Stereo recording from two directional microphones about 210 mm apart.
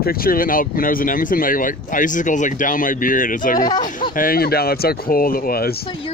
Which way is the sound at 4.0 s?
40° left (ahead or behind).